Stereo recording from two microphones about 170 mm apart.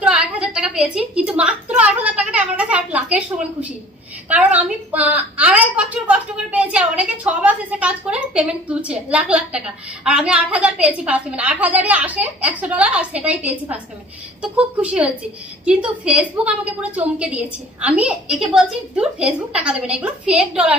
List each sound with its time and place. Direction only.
0.0 s a woman's voice: 5° right (ahead or behind)